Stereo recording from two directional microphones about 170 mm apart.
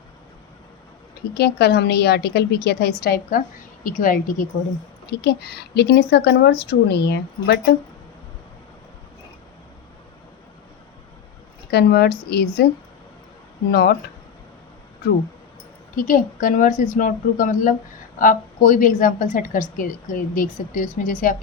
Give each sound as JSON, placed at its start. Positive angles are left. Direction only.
{"t": 1.3, "sound": "a woman's voice", "side_deg": 70}
{"t": 5.0, "sound": "a woman's voice", "side_deg": 80}
{"t": 11.7, "sound": "a woman's voice", "side_deg": 70}
{"t": 13.7, "sound": "a woman's voice", "side_deg": 70}
{"t": 16.0, "sound": "a woman's voice", "side_deg": 55}